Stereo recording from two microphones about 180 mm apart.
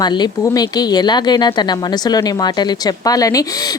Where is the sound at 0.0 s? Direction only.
25° left (ahead or behind).